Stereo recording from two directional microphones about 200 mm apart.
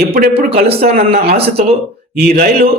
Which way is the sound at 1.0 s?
30° right (ahead or behind).